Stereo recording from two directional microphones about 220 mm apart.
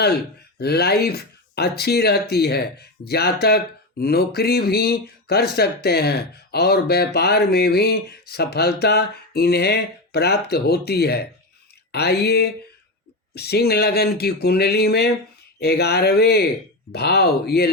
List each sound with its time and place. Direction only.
0.6 s speech: 45° left (ahead or behind)